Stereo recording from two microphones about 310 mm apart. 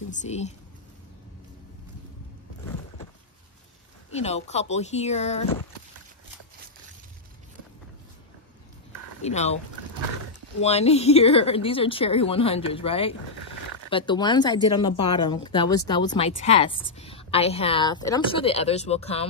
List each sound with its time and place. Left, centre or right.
0.1 s speech: left
4.1 s speech: left
9.2 s speech: left
10.6 s speech: centre